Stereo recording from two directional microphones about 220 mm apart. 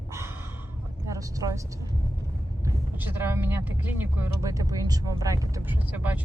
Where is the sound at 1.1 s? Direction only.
15° right (ahead or behind).